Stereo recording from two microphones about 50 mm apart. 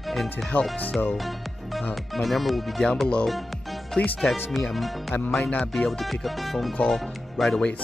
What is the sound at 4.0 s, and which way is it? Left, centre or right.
Speech, left.